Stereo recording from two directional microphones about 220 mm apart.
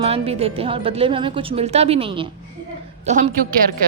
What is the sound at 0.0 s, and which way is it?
Speech, 25° right (ahead or behind).